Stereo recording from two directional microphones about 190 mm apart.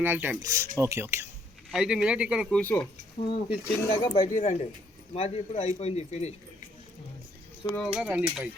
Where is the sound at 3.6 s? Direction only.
10° left (ahead or behind).